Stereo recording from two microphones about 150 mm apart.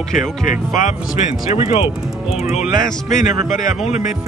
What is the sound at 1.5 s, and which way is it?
Speech, 45° left (ahead or behind).